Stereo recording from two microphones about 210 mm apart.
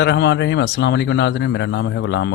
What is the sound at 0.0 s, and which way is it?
Speech, 55° left (ahead or behind).